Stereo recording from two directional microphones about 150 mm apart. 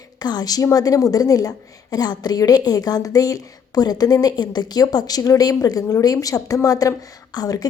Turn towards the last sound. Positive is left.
turn(degrees=25)  # may be behind; listen again after turning